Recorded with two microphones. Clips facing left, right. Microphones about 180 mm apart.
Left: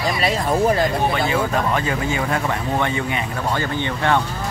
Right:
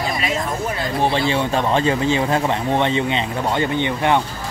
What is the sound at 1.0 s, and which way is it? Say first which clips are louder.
Speech: right 1 dB; 30° right (ahead or behind).